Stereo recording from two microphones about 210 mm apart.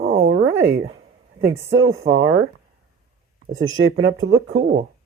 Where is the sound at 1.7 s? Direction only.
65° right (ahead or behind).